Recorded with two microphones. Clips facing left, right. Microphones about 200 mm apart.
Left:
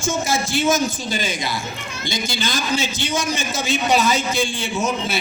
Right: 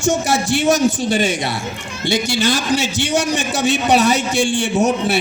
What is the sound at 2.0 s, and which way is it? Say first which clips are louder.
A man's voice: right 8 dB; 70° right (ahead or behind).